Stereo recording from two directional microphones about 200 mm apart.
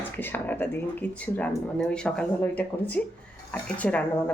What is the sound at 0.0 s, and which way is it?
Speech, 10° left (ahead or behind).